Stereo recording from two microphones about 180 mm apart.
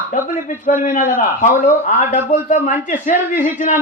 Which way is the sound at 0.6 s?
50° left (ahead or behind).